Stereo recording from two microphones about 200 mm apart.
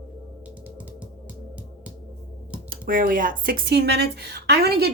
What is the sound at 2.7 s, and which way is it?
Speech, 45° right (ahead or behind).